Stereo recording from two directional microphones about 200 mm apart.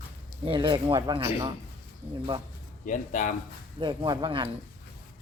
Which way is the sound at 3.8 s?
20° right (ahead or behind).